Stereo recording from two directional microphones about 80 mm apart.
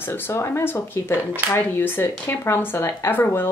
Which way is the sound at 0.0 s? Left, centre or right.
Left.